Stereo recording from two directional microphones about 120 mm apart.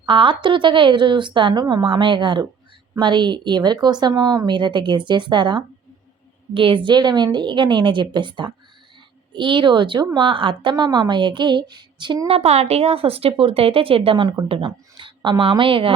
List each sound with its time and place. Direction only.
0.0 s speech: 45° right (ahead or behind)
12.4 s speech: 60° right (ahead or behind)